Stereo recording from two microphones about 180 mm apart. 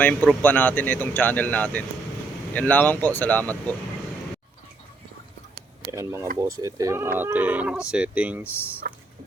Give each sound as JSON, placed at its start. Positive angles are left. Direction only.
{"t": 0.0, "sound": "speech", "side_deg": 10}
{"t": 5.9, "sound": "speech", "side_deg": -15}